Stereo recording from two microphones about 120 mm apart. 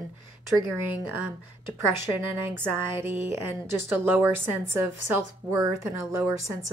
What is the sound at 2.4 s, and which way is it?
A woman's voice, 20° right (ahead or behind).